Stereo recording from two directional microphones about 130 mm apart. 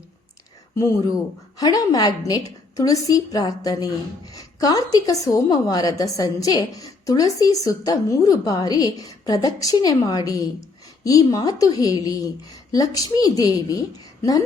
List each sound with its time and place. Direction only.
0.8 s a woman's voice: 25° left (ahead or behind)